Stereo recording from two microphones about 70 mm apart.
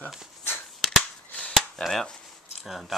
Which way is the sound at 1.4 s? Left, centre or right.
Centre.